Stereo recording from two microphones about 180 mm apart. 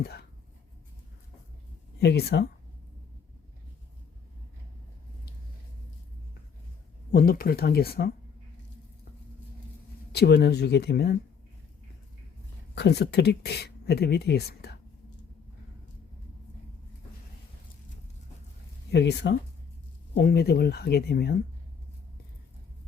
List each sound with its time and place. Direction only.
0.0 s a sound: 65° left (ahead or behind)
2.0 s speech: 65° left (ahead or behind)
7.1 s speech: 55° left (ahead or behind)
10.1 s speech: 65° left (ahead or behind)
12.7 s speech: 70° left (ahead or behind)
18.9 s speech: 70° left (ahead or behind)